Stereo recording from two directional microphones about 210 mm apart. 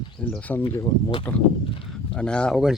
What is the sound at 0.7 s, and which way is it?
Speech, 20° left (ahead or behind).